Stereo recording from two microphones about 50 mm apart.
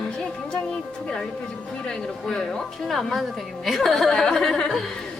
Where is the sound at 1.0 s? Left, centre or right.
Centre.